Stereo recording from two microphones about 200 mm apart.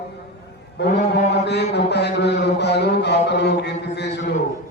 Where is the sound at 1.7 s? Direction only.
55° left (ahead or behind).